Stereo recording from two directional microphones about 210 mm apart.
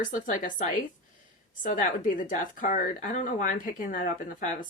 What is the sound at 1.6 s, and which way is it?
A woman's voice, 40° left (ahead or behind).